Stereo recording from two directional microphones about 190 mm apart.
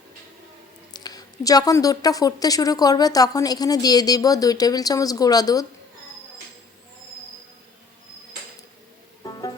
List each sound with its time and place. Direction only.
0.9 s a woman's voice: 20° left (ahead or behind)